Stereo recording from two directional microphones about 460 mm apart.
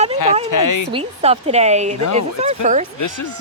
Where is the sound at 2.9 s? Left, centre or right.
Left.